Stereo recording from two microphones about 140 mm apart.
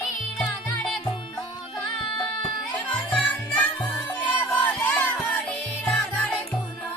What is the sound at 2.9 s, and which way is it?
Music, 10° left (ahead or behind).